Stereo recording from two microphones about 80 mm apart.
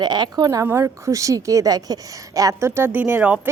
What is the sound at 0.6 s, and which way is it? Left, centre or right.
A woman's voice, right.